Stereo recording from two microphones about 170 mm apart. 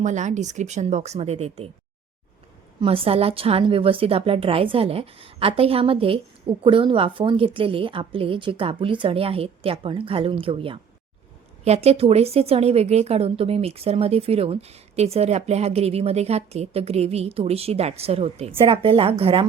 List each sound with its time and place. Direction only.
0.0 s speech: 45° right (ahead or behind)
2.8 s a woman's voice: 35° right (ahead or behind)